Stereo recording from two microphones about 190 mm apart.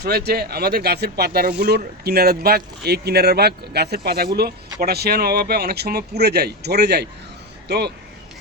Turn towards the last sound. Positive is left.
turn(degrees=-60)  # may be behind; listen again after turning